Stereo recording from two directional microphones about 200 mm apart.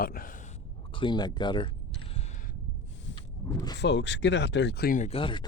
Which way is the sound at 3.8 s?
60° left (ahead or behind).